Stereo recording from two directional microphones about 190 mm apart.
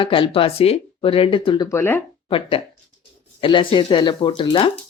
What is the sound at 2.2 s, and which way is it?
Speech, 30° left (ahead or behind).